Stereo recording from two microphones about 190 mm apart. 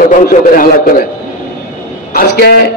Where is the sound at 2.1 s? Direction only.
55° left (ahead or behind).